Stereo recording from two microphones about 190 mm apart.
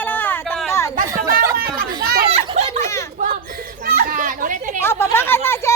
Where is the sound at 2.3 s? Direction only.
35° right (ahead or behind).